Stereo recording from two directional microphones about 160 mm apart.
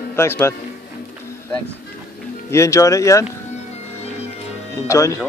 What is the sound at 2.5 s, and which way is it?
Speech, 20° left (ahead or behind).